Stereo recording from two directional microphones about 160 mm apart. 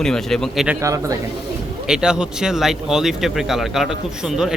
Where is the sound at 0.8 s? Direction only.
20° right (ahead or behind).